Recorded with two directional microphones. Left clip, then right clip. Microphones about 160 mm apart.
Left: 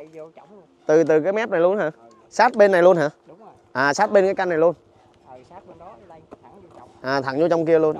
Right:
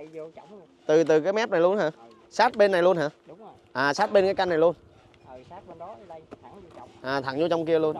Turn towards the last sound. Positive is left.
turn(degrees=45)  # may be behind; listen again after turning